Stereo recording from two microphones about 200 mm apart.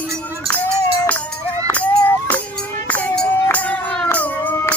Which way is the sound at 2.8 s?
10° left (ahead or behind).